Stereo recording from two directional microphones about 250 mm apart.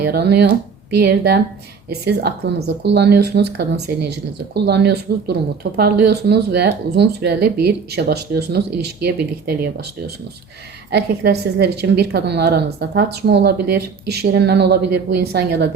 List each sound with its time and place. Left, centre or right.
0.0 s speech: right
10.9 s speech: right